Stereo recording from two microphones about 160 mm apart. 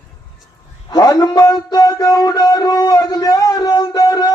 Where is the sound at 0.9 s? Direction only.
25° left (ahead or behind).